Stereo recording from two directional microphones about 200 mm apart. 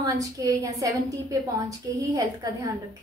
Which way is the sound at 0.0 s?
15° right (ahead or behind).